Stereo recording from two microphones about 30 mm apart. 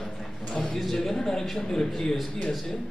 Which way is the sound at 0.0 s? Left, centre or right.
Centre.